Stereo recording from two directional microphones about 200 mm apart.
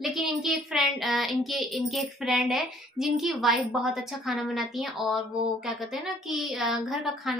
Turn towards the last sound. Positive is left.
turn(degrees=0)  # may be behind; listen again after turning